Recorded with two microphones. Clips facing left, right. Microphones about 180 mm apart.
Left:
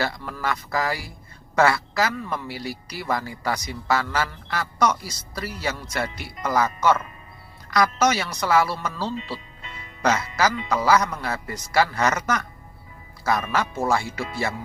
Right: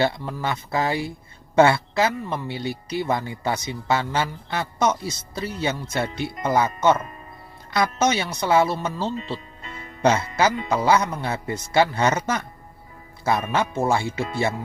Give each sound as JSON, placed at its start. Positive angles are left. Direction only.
{"t": 0.0, "sound": "a man's voice", "side_deg": -25}
{"t": 9.6, "sound": "music", "side_deg": -45}
{"t": 10.0, "sound": "a man's voice", "side_deg": -25}